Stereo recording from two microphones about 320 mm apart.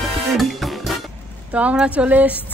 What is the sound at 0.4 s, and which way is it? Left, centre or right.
Music, centre.